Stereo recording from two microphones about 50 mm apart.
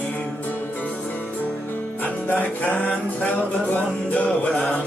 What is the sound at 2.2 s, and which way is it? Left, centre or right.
Music, left.